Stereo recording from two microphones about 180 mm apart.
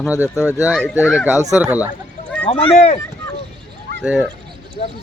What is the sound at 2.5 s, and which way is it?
Speech, 35° left (ahead or behind).